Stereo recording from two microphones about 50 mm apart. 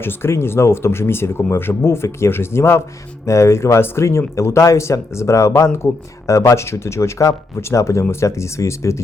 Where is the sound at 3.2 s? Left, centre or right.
Left.